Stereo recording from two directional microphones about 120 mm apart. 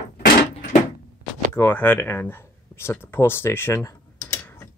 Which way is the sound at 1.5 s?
15° left (ahead or behind).